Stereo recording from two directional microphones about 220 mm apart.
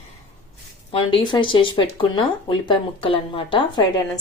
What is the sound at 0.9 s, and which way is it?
A woman's voice, 20° left (ahead or behind).